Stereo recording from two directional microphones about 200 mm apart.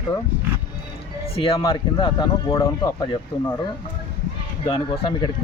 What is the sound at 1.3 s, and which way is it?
Speech, 25° left (ahead or behind).